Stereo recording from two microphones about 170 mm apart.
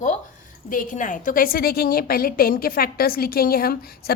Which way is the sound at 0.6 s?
50° left (ahead or behind).